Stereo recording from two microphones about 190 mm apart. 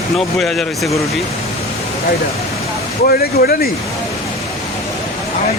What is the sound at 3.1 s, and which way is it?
Speech, 55° left (ahead or behind).